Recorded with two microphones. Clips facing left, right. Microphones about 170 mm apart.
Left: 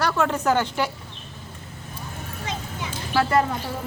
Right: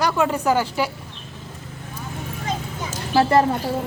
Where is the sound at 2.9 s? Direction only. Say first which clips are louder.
Right 4 dB; 30° right (ahead or behind).